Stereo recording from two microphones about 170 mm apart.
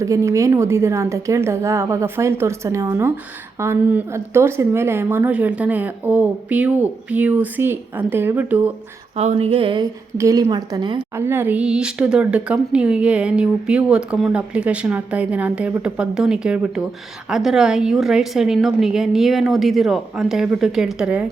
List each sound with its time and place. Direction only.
0.0 s speech: 15° right (ahead or behind)
9.1 s a sound: 40° right (ahead or behind)
10.2 s a woman's voice: 20° right (ahead or behind)
11.2 s a woman's voice: 15° right (ahead or behind)